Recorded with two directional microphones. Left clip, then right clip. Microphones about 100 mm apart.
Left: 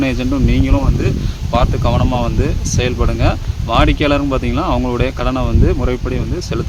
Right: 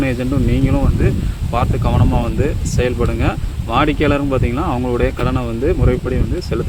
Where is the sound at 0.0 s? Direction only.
35° left (ahead or behind).